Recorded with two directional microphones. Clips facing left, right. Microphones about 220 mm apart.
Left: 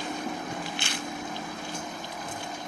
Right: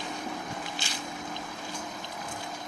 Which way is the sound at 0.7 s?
60° left (ahead or behind).